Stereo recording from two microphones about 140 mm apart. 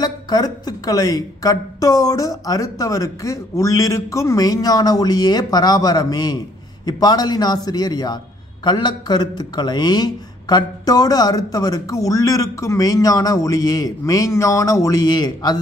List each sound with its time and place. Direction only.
0.0 s a man's voice: 30° left (ahead or behind)